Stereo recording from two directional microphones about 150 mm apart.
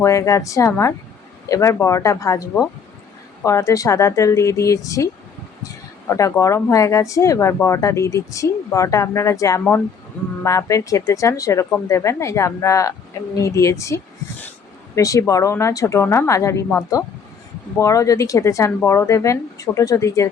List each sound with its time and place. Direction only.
0.0 s speech: 20° left (ahead or behind)
6.1 s speech: 20° left (ahead or behind)